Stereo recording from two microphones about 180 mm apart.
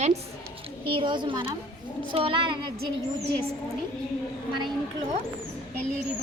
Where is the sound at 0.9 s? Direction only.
25° right (ahead or behind).